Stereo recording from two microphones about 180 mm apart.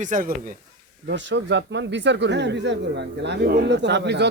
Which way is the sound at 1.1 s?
80° right.